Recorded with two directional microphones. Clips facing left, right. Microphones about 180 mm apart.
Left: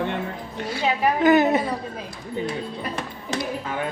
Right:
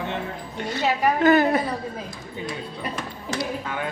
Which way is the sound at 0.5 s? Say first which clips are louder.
Right 1 dB; 5° left (ahead or behind).